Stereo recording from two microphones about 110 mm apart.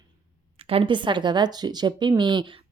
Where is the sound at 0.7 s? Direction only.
55° right (ahead or behind).